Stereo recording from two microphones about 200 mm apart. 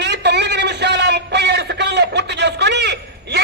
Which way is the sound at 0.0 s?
60° right (ahead or behind).